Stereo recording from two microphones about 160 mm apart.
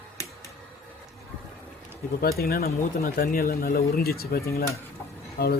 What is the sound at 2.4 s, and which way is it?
Speech, 70° left (ahead or behind).